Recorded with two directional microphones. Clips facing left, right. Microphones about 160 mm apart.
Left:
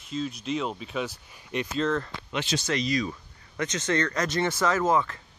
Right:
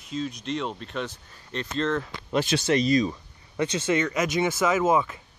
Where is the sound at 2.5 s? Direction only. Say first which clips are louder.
Right 4 dB; 80° right.